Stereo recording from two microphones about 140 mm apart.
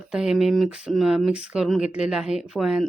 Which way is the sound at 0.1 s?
5° right (ahead or behind).